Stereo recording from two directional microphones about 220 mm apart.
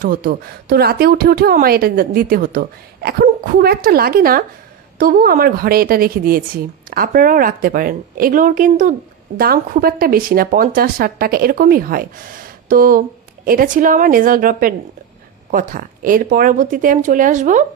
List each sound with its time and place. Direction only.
0.0 s a woman's voice: 40° right (ahead or behind)